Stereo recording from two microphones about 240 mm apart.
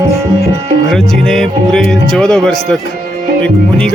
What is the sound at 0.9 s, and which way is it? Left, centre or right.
Speech, centre.